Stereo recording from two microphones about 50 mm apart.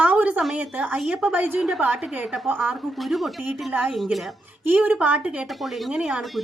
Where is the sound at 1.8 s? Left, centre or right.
Right.